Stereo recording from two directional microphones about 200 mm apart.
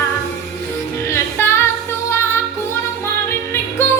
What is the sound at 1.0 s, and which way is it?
Music, 15° left (ahead or behind).